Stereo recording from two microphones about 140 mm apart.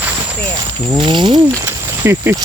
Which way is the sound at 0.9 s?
35° right (ahead or behind).